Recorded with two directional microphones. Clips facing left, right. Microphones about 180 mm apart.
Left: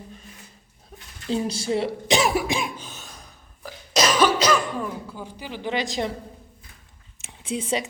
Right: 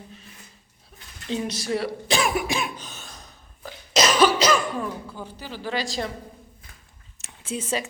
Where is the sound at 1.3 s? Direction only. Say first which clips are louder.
Left 2 dB; 30° left (ahead or behind).